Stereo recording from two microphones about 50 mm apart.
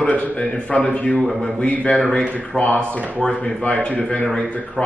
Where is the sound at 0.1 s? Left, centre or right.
Left.